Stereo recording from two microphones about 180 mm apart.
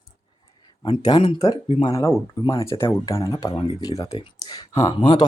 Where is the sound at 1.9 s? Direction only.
15° left (ahead or behind).